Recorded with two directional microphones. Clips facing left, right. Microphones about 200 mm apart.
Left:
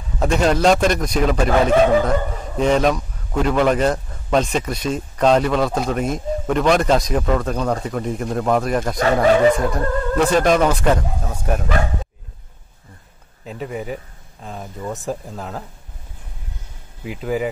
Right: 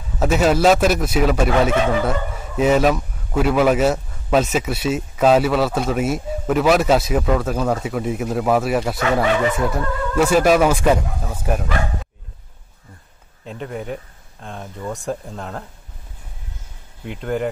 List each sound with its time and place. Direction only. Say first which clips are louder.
0.2 s a man's voice: right 1 dB; 5° right (ahead or behind)
8.9 s speech: left 3 dB; 40° left (ahead or behind)
9.7 s a man's voice: left 2 dB; 5° right (ahead or behind)
13.5 s a man's voice: left 1 dB; 5° left (ahead or behind)
17.0 s a man's voice: left 1 dB; 5° left (ahead or behind)